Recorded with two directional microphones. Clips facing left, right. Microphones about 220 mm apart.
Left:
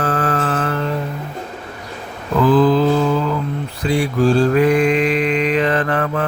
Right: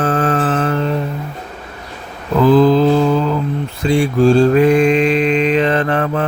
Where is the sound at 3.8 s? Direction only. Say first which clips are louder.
Right 4 dB; 25° right (ahead or behind).